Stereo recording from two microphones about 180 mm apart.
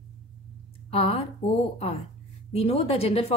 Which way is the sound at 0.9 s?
35° left (ahead or behind).